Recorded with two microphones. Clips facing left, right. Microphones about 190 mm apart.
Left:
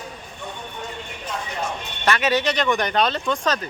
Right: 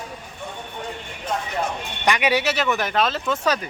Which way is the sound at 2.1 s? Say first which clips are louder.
Even; 15° right (ahead or behind).